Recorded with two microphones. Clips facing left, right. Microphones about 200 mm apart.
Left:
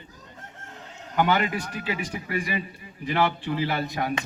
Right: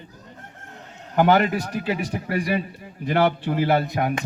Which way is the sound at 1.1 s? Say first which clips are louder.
Right 5 dB; 45° right (ahead or behind).